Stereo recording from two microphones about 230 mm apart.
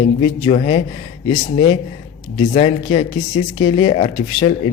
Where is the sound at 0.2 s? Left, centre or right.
Left.